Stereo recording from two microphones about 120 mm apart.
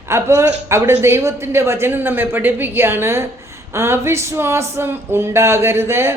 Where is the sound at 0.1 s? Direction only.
25° right (ahead or behind).